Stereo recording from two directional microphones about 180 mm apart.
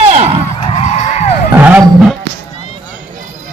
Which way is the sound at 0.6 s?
35° left (ahead or behind).